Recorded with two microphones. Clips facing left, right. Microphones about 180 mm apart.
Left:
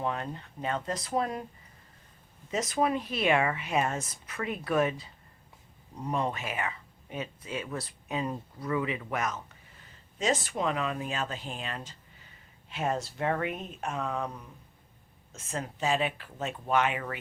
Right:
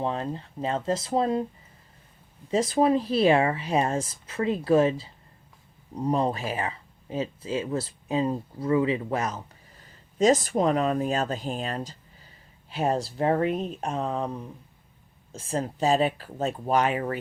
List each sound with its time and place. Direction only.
0.0 s speech: 30° right (ahead or behind)
2.5 s speech: 30° right (ahead or behind)
15.3 s speech: 35° right (ahead or behind)